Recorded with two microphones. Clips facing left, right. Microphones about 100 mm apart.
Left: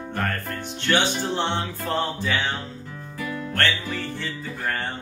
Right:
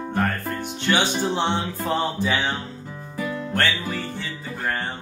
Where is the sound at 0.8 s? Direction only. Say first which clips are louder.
Right 1 dB; 15° right (ahead or behind).